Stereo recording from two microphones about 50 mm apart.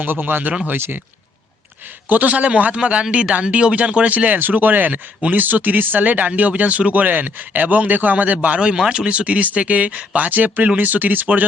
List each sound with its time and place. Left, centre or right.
0.0 s speech: right
2.0 s speech: right